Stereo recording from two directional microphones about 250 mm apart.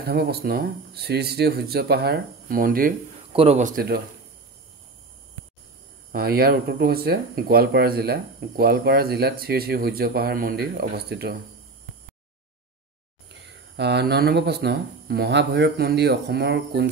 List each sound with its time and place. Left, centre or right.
0.0 s speech: right
6.1 s speech: right
13.7 s speech: right